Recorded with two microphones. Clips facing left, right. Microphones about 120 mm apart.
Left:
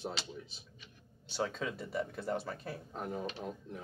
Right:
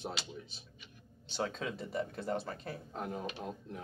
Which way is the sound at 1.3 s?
5° left (ahead or behind).